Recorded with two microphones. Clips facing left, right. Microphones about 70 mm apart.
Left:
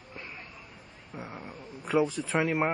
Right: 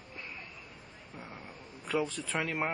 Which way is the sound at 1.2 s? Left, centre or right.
Centre.